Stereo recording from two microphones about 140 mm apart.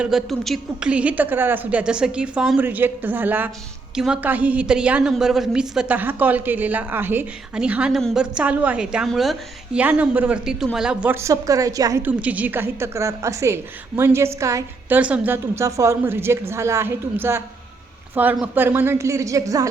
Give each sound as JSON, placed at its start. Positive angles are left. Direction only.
{"t": 0.0, "sound": "a woman's voice", "side_deg": -5}
{"t": 9.8, "sound": "a woman's voice", "side_deg": -10}
{"t": 12.0, "sound": "a woman's voice", "side_deg": -10}